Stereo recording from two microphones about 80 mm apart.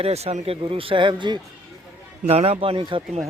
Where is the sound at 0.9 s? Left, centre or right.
Right.